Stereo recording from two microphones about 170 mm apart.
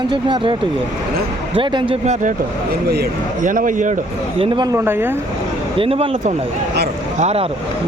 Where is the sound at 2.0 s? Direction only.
45° right (ahead or behind).